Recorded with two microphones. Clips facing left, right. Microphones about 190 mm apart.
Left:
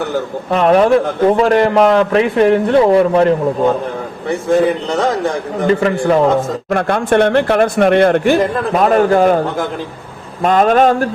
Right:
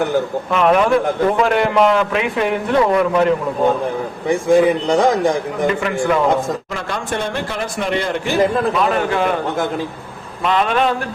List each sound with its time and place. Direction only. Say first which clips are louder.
0.5 s a man's voice: left 4 dB; 35° left (ahead or behind)
4.3 s a man's voice: even; 15° right (ahead or behind)
5.6 s a man's voice: left 5 dB; 35° left (ahead or behind)
6.7 s speech: left 10 dB; 55° left (ahead or behind)
8.7 s a man's voice: left 6 dB; 45° left (ahead or behind)
10.4 s a man's voice: left 6 dB; 45° left (ahead or behind)